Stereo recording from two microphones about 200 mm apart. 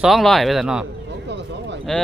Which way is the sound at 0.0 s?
Centre (ahead or behind).